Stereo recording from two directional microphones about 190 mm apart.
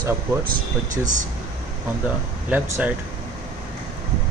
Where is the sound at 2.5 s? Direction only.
10° right (ahead or behind).